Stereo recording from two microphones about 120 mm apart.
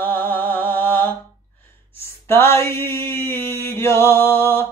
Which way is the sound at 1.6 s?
20° left (ahead or behind).